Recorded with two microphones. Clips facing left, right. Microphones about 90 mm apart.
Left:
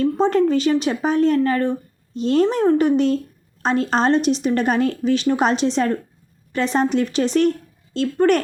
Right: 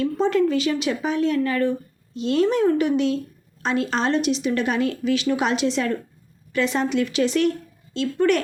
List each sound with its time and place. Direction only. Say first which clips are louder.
0.0 s speech: left 3 dB; 40° left (ahead or behind)